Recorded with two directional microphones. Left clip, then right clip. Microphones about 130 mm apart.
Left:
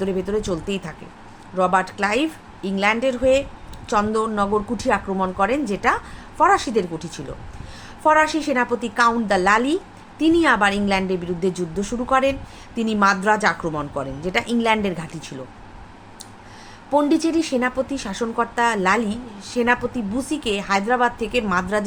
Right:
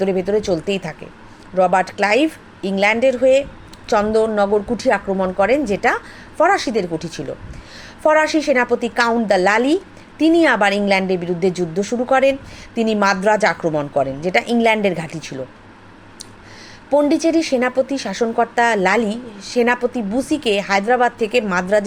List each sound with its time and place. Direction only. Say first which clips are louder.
0.0 s a woman's voice: right 5 dB; 20° right (ahead or behind)
16.9 s a woman's voice: right 4 dB; 25° right (ahead or behind)